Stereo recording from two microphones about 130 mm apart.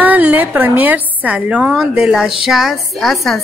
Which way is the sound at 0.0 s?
15° right (ahead or behind).